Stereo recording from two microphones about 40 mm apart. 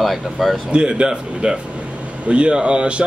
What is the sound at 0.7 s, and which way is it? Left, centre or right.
Speech, right.